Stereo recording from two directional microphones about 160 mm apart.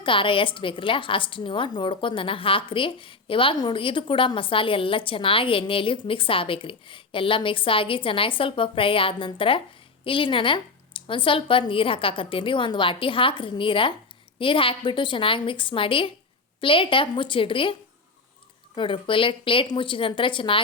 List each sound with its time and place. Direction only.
0.0 s a woman's voice: 30° left (ahead or behind)
18.8 s a woman's voice: 30° left (ahead or behind)